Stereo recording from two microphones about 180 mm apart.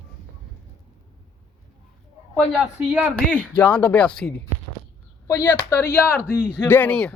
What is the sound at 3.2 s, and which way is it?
Speech, 5° left (ahead or behind).